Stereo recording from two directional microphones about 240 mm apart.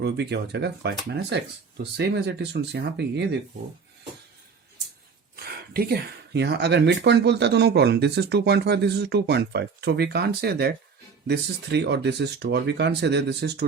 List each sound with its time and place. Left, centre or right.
0.0 s speech: right
5.7 s speech: right